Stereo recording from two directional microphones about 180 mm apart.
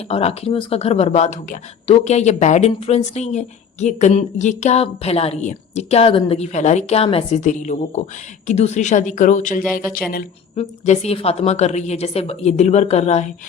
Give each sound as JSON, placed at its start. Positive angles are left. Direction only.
{"t": 0.1, "sound": "speech", "side_deg": 35}
{"t": 10.5, "sound": "speech", "side_deg": 40}